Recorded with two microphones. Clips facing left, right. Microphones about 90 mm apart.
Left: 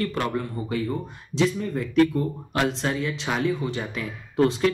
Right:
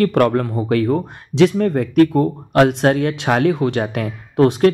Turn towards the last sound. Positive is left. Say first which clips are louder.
# right 7 dB
turn(degrees=-60)  # may be behind; listen again after turning